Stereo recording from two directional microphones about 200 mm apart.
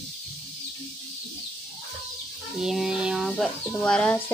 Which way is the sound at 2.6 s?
5° right (ahead or behind).